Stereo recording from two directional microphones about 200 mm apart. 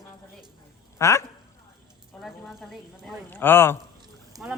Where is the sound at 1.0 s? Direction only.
15° left (ahead or behind).